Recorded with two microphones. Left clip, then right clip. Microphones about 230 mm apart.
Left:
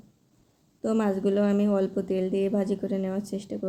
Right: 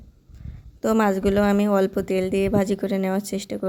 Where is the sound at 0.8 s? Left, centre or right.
Right.